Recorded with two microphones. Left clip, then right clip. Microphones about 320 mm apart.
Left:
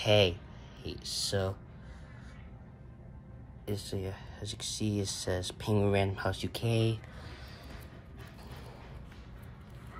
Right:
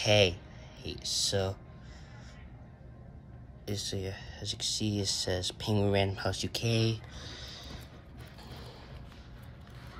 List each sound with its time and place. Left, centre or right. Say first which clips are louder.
0.0 s speech: right 1 dB; centre
3.6 s speech: right 1 dB; centre